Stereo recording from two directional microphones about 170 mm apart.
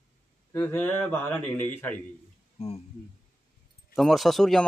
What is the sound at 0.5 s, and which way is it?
A man's voice, 10° left (ahead or behind).